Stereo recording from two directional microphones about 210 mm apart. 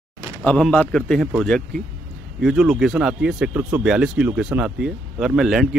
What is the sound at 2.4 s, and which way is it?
Speech, 5° right (ahead or behind).